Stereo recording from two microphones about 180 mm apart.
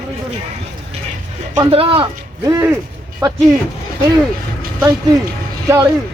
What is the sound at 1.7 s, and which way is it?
Speech, 30° right (ahead or behind).